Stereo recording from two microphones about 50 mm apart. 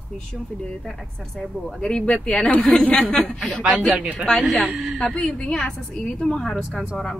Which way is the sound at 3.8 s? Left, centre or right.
Right.